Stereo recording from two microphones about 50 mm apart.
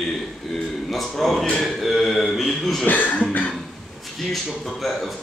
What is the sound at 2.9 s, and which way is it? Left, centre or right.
Cough, left.